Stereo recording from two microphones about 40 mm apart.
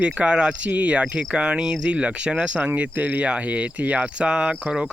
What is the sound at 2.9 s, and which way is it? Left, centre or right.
Speech, right.